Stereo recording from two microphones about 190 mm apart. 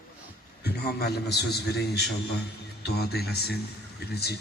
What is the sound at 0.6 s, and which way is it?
A man's voice, 60° left (ahead or behind).